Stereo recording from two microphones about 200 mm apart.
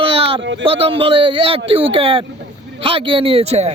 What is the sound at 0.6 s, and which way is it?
A man's voice, 30° right (ahead or behind).